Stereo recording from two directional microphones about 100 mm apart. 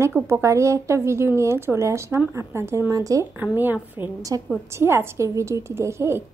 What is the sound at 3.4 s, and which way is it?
Speech, 20° right (ahead or behind).